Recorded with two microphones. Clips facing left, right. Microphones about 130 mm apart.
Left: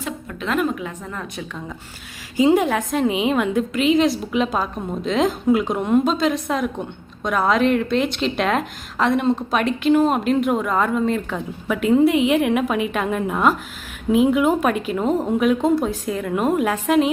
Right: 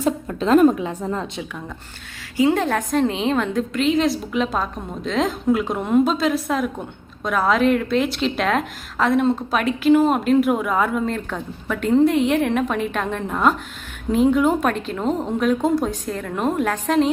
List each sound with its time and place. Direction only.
0.3 s a woman's voice: 35° right (ahead or behind)
2.4 s a woman's voice: 20° left (ahead or behind)
2.6 s a woman's voice: 5° left (ahead or behind)